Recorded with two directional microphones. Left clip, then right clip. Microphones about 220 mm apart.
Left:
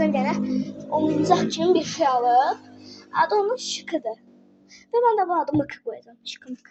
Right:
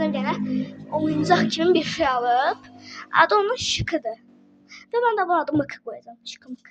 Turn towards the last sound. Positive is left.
turn(degrees=-20)  # may be behind; listen again after turning